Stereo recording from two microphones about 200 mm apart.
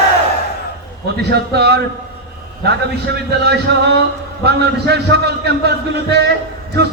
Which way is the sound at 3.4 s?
55° right (ahead or behind).